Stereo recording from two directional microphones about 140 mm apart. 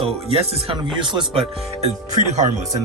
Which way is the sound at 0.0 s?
45° right (ahead or behind).